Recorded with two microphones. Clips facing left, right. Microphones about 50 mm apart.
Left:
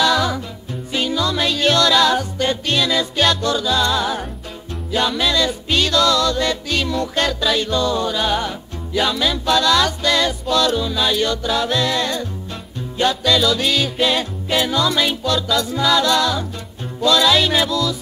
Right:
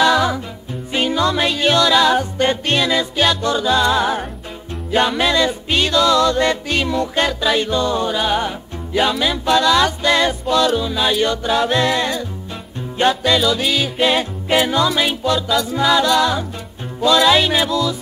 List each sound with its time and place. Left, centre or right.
0.0 s music: right
0.9 s music: right; by 2.2 s centre
2.3 s music: right
2.9 s music: centre
3.4 s music: right
13.4 s music: centre
14.0 s music: right
15.5 s music: centre
15.8 s music: centre